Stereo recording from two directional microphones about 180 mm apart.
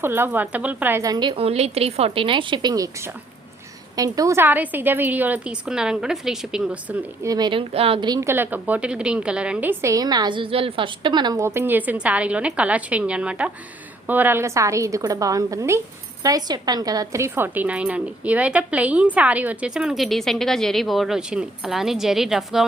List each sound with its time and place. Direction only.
0.0 s a woman's voice: 10° right (ahead or behind)
7.2 s speech: 20° right (ahead or behind); by 22.6 s centre (ahead or behind)